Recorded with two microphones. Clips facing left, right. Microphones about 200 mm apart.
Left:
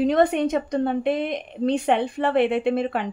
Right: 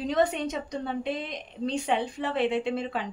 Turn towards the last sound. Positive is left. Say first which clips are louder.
# left 6 dB
turn(degrees=60)  # may be behind; listen again after turning